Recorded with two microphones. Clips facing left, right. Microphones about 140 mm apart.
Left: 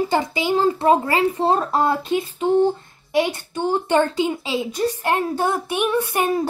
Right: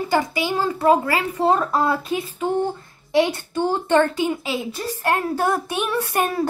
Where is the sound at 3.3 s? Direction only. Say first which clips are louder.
Even; 15° left (ahead or behind).